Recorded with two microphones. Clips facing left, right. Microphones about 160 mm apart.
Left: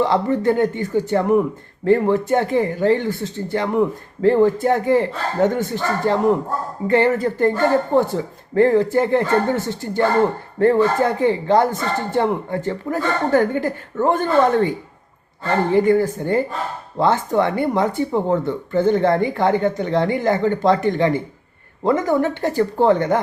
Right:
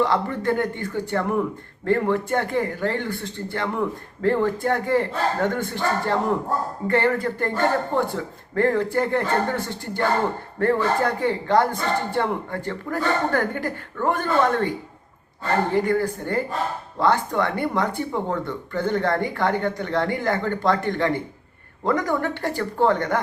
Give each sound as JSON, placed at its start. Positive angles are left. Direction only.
{"t": 0.0, "sound": "speech", "side_deg": 20}
{"t": 15.7, "sound": "speech", "side_deg": 20}